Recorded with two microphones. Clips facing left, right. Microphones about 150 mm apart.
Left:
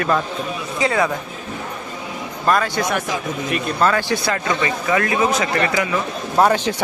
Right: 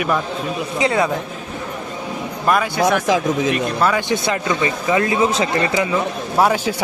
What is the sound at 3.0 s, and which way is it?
Speech, 90° right.